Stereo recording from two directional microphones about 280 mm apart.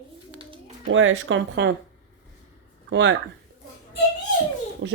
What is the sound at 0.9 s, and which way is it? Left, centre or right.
Speech, right.